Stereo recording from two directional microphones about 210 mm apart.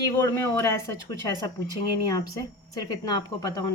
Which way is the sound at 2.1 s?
15° left (ahead or behind).